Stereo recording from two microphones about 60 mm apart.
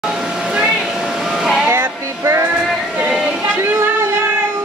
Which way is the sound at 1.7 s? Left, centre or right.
Right.